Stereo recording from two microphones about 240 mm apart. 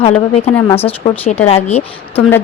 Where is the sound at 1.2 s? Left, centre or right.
Left.